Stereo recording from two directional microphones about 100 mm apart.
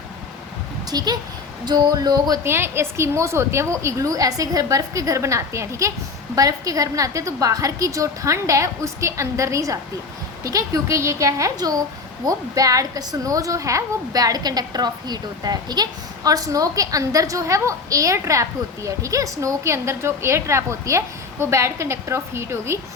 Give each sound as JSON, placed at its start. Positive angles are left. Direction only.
{"t": 0.9, "sound": "speech", "side_deg": -40}
{"t": 1.6, "sound": "a sound", "side_deg": -45}
{"t": 2.4, "sound": "a woman's voice", "side_deg": -25}